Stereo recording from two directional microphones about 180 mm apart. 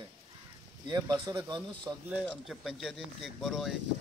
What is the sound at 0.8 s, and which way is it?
Speech, 25° right (ahead or behind).